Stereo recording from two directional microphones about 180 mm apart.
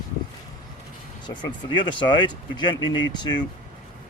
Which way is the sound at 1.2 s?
25° left (ahead or behind).